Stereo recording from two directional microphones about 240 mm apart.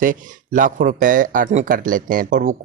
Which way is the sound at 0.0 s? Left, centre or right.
Right.